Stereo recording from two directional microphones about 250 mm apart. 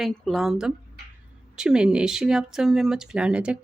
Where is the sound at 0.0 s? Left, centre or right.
Centre.